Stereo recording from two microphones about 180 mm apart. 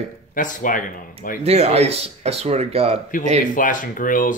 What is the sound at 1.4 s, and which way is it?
Speech, 35° right (ahead or behind).